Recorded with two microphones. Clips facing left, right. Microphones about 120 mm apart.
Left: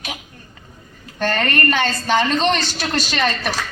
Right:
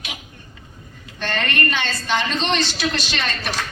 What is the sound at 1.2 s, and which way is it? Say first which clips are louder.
A child's voice: left 4 dB; 45° left (ahead or behind).